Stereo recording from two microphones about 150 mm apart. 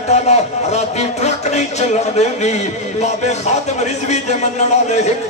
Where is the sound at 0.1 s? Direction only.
45° left (ahead or behind).